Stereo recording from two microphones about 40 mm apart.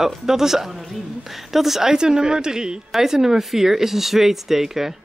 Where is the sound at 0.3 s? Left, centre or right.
Centre.